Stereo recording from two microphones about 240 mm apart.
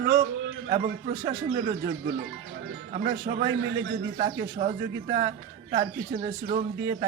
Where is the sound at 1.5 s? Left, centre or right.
Right.